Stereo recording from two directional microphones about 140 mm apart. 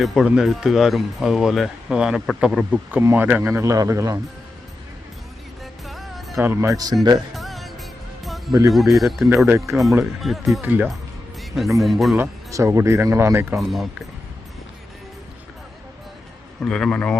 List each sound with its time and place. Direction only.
0.0 s speech: centre (ahead or behind)
3.0 s speech: 15° right (ahead or behind)
5.8 s music: centre (ahead or behind)
6.4 s speech: 15° right (ahead or behind)
7.3 s music: centre (ahead or behind)
8.7 s speech: centre (ahead or behind)
10.6 s speech: 15° right (ahead or behind)
11.3 s music: centre (ahead or behind)
11.8 s speech: centre (ahead or behind)
12.1 s speech: 20° right (ahead or behind)
13.6 s speech: centre (ahead or behind)
16.6 s speech: 5° left (ahead or behind)